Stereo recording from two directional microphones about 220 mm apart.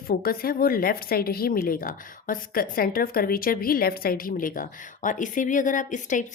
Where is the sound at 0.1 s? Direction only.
40° left (ahead or behind).